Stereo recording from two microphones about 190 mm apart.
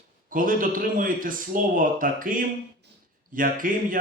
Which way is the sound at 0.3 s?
45° right (ahead or behind).